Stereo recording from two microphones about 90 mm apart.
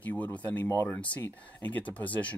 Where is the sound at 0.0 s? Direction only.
15° left (ahead or behind).